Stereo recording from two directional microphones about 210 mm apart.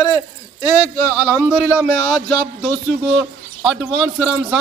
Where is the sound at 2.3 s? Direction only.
5° left (ahead or behind).